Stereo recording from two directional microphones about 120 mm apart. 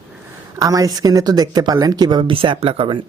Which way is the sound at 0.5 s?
30° right (ahead or behind).